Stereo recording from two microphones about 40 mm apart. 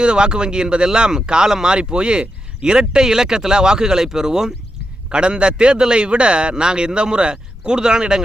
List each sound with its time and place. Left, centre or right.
0.0 s a man's voice: right